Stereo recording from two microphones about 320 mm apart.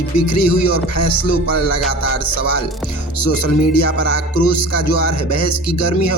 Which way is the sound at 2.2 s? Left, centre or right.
Left.